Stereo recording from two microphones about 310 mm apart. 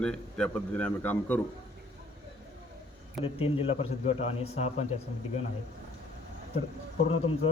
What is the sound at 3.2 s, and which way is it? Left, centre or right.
A man's voice, centre.